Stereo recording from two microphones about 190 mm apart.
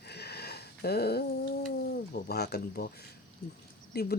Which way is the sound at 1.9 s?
55° left (ahead or behind).